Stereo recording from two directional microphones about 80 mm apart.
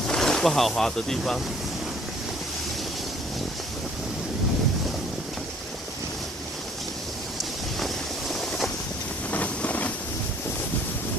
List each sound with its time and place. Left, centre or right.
0.0 s speech: centre
7.8 s vehicle: centre
9.3 s vehicle: centre